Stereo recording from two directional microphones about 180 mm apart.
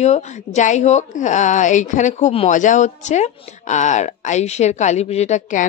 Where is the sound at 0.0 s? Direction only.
40° left (ahead or behind).